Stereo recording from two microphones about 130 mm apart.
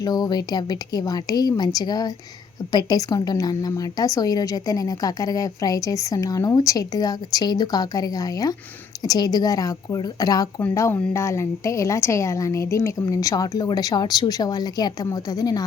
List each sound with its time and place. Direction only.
0.0 s a woman's voice: 30° left (ahead or behind)